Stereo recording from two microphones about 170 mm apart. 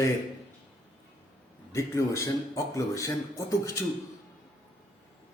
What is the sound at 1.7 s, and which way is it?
A man's voice, 15° left (ahead or behind).